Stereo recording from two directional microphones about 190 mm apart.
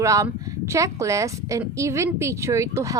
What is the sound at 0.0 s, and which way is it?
A woman's voice, 15° right (ahead or behind).